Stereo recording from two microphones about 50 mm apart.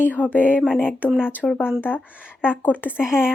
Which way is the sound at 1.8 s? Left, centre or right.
Left.